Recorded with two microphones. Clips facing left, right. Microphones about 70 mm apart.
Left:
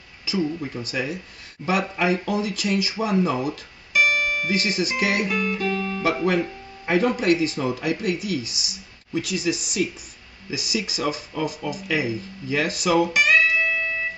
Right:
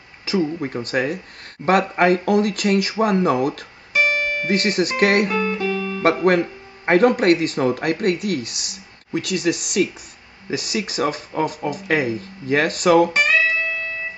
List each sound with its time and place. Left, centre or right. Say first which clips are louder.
0.2 s speech: right 4 dB; right
3.9 s music: right 1 dB; right
4.5 s speech: right 4 dB; right
5.3 s speech: right 3 dB; right
5.7 s guitar: right 2 dB; centre
6.0 s speech: right 6 dB; right